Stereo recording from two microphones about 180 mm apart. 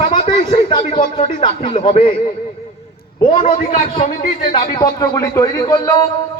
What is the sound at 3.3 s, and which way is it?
Speech, 30° left (ahead or behind).